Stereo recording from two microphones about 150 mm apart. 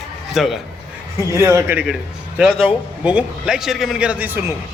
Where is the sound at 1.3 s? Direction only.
20° right (ahead or behind).